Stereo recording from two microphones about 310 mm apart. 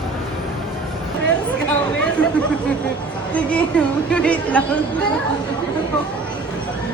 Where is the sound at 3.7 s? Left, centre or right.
Centre.